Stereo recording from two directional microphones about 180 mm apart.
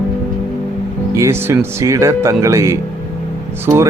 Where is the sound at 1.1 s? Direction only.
15° right (ahead or behind).